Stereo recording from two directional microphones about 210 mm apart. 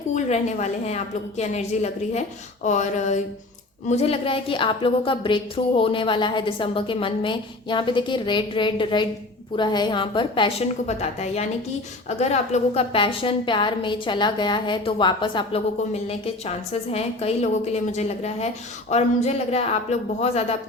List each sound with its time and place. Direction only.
0.1 s a woman's voice: 35° left (ahead or behind)